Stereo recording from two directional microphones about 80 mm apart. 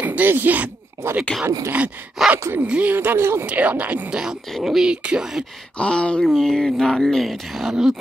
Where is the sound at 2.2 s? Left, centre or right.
Centre.